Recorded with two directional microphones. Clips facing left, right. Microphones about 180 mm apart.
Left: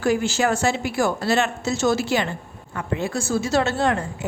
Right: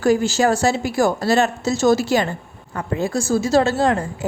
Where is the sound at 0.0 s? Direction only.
40° right (ahead or behind).